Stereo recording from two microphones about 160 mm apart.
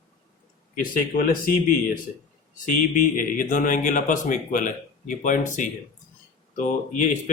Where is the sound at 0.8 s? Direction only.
65° left (ahead or behind).